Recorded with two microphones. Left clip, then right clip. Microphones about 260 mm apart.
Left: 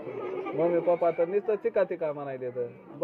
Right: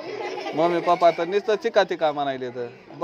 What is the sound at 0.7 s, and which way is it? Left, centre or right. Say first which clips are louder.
Speech: right 7 dB; right.